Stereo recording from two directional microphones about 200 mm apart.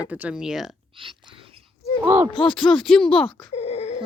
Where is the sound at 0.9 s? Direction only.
25° right (ahead or behind).